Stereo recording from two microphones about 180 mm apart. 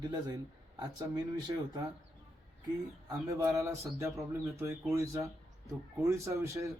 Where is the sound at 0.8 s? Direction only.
20° right (ahead or behind).